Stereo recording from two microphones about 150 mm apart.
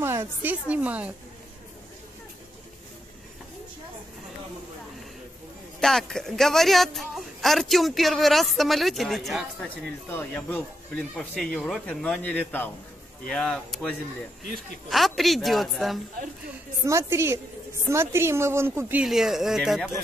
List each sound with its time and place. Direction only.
0.0 s a woman's voice: 15° right (ahead or behind)
5.8 s speech: centre (ahead or behind)
10.1 s speech: 15° left (ahead or behind)
16.8 s a woman's voice: 20° right (ahead or behind)
19.0 s speech: centre (ahead or behind)